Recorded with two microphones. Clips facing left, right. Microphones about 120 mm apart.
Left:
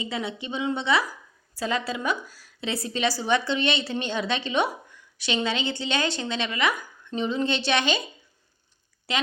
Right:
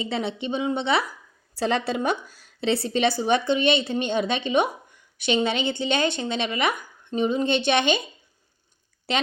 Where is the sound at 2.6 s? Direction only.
30° right (ahead or behind).